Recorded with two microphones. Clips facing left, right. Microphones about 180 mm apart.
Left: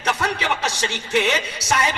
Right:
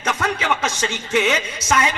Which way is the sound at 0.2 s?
35° left (ahead or behind).